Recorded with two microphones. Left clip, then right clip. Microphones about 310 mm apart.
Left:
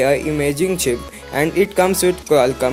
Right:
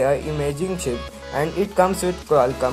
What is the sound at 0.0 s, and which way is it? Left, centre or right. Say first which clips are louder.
Speech: left 4 dB; left.